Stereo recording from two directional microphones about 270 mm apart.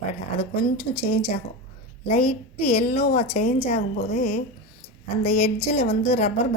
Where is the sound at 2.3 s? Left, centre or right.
Left.